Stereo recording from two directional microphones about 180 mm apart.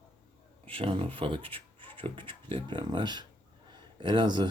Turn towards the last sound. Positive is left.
turn(degrees=-25)  # may be behind; listen again after turning